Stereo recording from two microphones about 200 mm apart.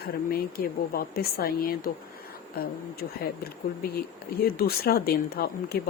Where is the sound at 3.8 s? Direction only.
50° left (ahead or behind).